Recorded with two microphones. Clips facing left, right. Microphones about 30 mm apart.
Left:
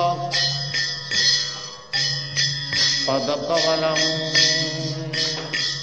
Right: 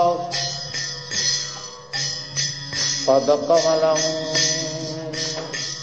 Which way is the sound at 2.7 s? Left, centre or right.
Left.